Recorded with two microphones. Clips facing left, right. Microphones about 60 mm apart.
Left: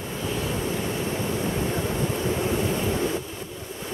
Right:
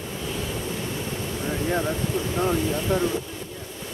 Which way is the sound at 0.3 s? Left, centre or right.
Centre.